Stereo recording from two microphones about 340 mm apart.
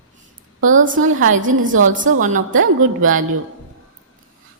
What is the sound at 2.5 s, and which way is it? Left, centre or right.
Speech, right.